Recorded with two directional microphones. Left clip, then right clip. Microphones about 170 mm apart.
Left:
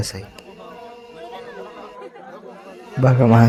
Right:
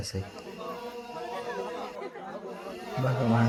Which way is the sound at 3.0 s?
50° left (ahead or behind).